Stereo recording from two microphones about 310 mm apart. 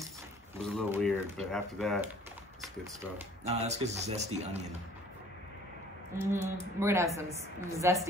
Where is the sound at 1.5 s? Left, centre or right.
Centre.